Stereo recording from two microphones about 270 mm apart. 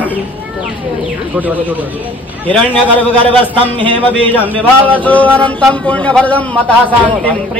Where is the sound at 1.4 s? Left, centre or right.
Centre.